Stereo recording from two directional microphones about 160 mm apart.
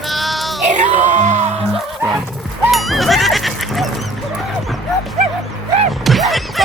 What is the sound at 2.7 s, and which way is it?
Music, centre (ahead or behind).